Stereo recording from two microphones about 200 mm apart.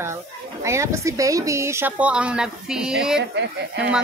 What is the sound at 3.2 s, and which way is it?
Speech, 60° right (ahead or behind).